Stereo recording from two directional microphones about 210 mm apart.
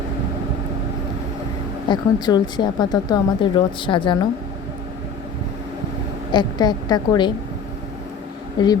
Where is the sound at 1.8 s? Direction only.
20° left (ahead or behind).